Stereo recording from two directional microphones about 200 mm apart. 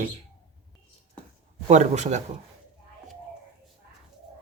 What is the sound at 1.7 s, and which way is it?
Speech, 35° right (ahead or behind).